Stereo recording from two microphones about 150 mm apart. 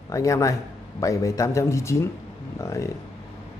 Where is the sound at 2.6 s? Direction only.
20° left (ahead or behind).